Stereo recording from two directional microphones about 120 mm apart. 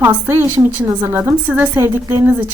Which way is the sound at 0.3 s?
20° right (ahead or behind).